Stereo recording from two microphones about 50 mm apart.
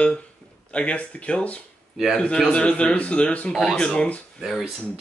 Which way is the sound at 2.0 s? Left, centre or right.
Centre.